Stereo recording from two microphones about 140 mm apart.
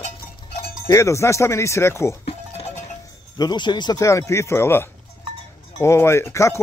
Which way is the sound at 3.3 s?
30° left (ahead or behind).